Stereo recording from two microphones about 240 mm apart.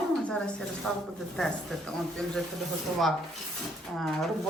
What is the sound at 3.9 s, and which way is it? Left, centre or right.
Speech, centre.